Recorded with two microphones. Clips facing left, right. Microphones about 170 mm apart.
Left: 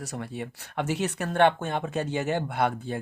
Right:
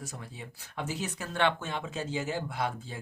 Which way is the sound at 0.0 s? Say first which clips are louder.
Left 9 dB; 70° left (ahead or behind).